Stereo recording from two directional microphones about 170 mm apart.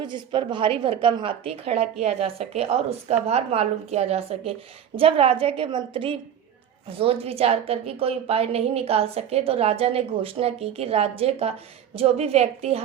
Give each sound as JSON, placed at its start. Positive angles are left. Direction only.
{"t": 0.0, "sound": "a woman's voice", "side_deg": -25}